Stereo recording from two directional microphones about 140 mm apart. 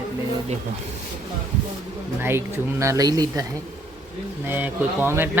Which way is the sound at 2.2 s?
15° right (ahead or behind).